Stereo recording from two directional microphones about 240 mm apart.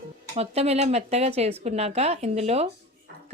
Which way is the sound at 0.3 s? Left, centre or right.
Right.